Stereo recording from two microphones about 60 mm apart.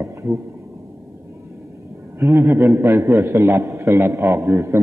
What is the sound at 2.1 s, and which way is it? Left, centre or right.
Speech, right.